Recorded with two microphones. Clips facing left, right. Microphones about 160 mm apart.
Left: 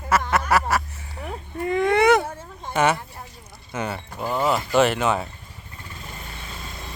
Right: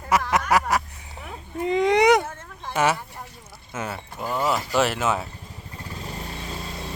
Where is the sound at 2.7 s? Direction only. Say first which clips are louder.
Left 2 dB; 5° right (ahead or behind).